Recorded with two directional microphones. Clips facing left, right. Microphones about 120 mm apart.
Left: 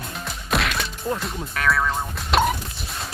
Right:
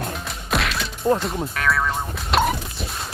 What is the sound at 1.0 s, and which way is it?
Speech, 35° right (ahead or behind).